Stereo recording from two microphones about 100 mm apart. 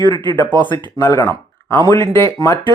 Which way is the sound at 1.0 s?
35° left (ahead or behind).